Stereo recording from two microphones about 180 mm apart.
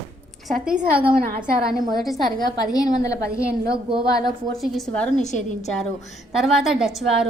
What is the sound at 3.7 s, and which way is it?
Speech, 30° right (ahead or behind).